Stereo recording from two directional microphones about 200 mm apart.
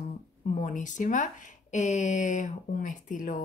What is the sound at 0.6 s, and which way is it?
Speech, 40° left (ahead or behind).